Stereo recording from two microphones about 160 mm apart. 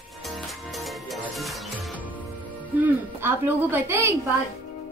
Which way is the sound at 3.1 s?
15° right (ahead or behind).